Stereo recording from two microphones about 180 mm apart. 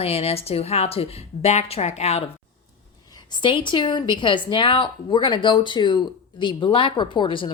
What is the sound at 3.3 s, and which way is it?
A woman's voice, 25° left (ahead or behind).